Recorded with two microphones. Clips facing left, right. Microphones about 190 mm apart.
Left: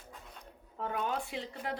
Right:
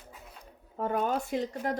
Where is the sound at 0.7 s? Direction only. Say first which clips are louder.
Right 6 dB; 40° right (ahead or behind).